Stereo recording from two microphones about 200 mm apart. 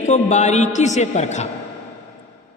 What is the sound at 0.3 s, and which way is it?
A man's voice, 35° left (ahead or behind).